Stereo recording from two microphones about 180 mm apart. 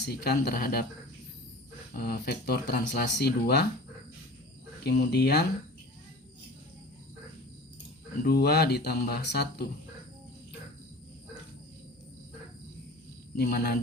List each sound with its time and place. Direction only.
0.0 s speech: 65° left (ahead or behind)
2.0 s speech: 65° left (ahead or behind)
4.8 s speech: 65° left (ahead or behind)
8.2 s speech: 60° left (ahead or behind)
13.3 s speech: 60° left (ahead or behind)